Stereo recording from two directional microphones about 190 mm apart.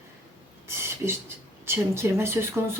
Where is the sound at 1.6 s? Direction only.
10° right (ahead or behind).